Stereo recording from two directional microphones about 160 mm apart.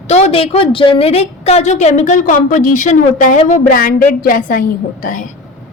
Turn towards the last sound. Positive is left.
turn(degrees=55)  # may be behind; listen again after turning